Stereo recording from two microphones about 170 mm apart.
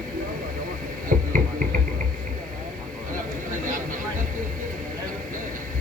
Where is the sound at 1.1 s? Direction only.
50° right (ahead or behind).